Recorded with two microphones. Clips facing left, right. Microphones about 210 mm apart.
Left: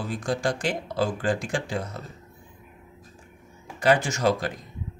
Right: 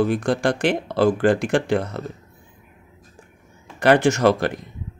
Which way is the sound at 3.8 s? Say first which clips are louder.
Right 6 dB; 65° right (ahead or behind).